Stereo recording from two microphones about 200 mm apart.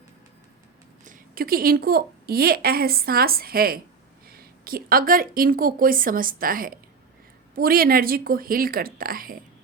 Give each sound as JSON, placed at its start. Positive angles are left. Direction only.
{"t": 1.0, "sound": "a woman's voice", "side_deg": -45}